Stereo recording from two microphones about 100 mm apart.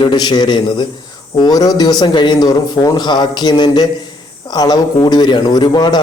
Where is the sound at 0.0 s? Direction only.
50° left (ahead or behind).